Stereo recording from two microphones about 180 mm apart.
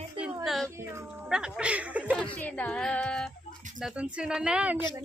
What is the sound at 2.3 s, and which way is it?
Female singing, 10° left (ahead or behind).